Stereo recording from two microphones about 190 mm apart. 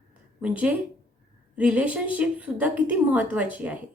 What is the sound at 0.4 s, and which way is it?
A woman's voice, 5° right (ahead or behind).